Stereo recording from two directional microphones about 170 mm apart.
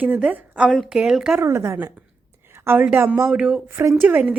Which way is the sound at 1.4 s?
15° right (ahead or behind).